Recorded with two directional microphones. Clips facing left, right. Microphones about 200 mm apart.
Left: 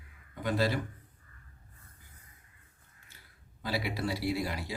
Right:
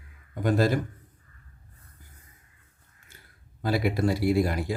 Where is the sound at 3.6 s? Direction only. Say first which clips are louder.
Right 8 dB; 50° right (ahead or behind).